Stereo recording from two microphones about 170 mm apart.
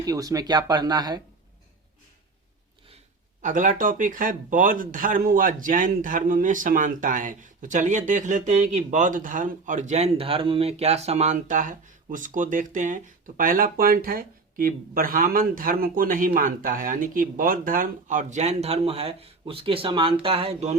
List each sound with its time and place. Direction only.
0.0 s speech: 20° right (ahead or behind)
3.4 s speech: 50° right (ahead or behind)